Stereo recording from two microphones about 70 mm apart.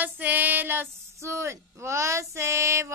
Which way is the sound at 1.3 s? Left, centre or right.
Right.